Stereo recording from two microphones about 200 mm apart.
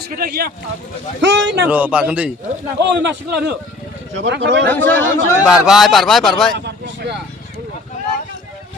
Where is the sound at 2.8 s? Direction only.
60° right (ahead or behind).